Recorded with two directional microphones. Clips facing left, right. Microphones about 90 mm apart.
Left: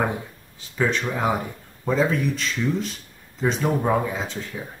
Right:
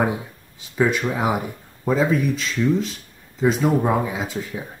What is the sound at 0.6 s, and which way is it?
Speech, 10° right (ahead or behind).